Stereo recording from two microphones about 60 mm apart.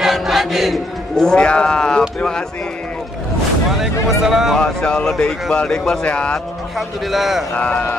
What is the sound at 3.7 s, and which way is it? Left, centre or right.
Speech, centre.